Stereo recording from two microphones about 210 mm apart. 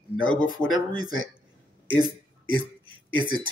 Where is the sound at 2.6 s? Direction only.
25° right (ahead or behind).